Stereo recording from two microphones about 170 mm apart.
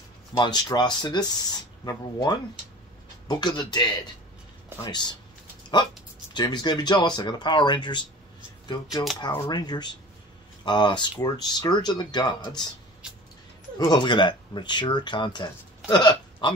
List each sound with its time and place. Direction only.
0.4 s speech: 25° left (ahead or behind)
6.3 s speech: 25° left (ahead or behind)
9.2 s speech: 25° left (ahead or behind)
13.7 s speech: 25° left (ahead or behind)